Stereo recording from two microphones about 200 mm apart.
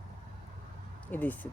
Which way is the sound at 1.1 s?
10° left (ahead or behind).